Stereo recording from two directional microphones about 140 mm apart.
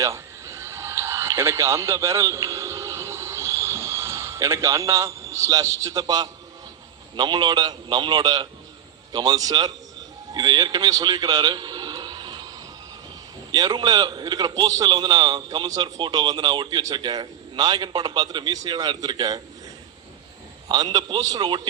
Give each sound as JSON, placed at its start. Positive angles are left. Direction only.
{"t": 0.0, "sound": "a sound", "side_deg": -20}
{"t": 7.2, "sound": "a man's voice", "side_deg": -30}
{"t": 13.5, "sound": "a man's voice", "side_deg": -30}
{"t": 20.7, "sound": "a man's voice", "side_deg": -30}